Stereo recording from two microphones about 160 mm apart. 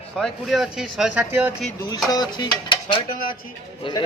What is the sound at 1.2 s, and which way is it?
Speech, 15° right (ahead or behind).